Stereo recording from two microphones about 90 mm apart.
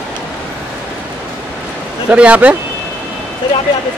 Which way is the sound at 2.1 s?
15° right (ahead or behind).